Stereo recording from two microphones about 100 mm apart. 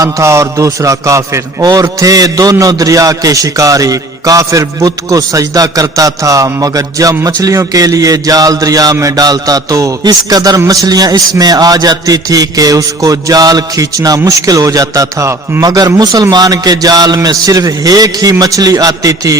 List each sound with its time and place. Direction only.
0.0 s a man's voice: 30° right (ahead or behind)